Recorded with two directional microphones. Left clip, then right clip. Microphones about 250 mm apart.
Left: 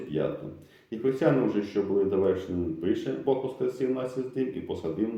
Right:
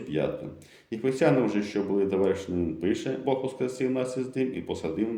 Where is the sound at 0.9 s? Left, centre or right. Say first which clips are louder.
Right 1 dB; right.